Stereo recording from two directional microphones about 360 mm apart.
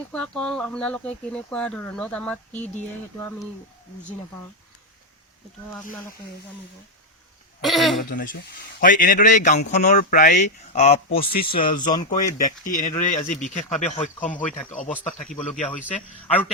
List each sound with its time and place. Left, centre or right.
0.1 s speech: centre
7.6 s speech: centre
8.1 s speech: left
14.8 s speech: centre
15.9 s speech: centre